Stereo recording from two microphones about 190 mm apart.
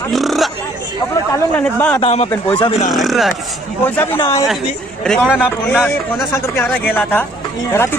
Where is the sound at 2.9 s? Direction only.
Centre (ahead or behind).